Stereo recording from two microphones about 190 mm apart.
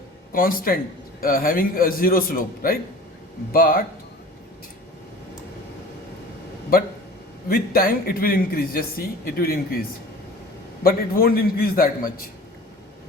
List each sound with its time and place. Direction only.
0.3 s a man's voice: 50° left (ahead or behind)
7.4 s a man's voice: 50° left (ahead or behind)
10.8 s a man's voice: 50° left (ahead or behind)